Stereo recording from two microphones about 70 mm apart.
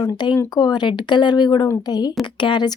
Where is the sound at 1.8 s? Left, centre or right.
Left.